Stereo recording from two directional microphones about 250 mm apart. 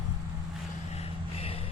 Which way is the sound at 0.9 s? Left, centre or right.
Left.